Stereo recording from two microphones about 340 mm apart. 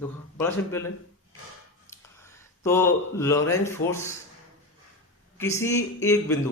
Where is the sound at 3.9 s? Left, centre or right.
Centre.